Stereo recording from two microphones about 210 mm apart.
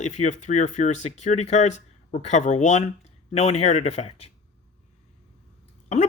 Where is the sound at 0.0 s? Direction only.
35° left (ahead or behind).